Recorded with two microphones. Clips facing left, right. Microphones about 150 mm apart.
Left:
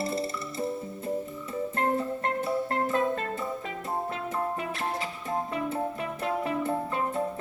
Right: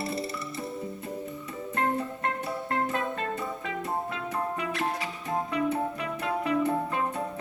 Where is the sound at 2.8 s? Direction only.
45° left (ahead or behind).